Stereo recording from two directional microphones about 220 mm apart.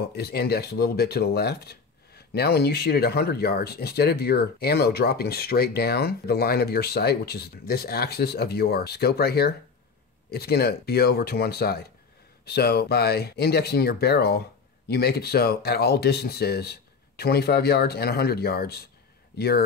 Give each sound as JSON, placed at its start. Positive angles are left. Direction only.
{"t": 0.1, "sound": "speech", "side_deg": 45}